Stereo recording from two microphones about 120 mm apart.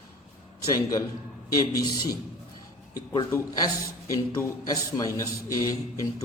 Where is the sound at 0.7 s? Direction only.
30° left (ahead or behind).